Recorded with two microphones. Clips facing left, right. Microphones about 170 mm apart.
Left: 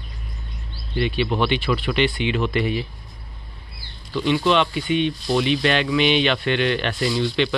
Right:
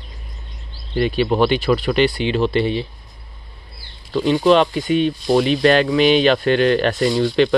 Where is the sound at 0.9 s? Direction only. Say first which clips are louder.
Right 5 dB; 40° right (ahead or behind).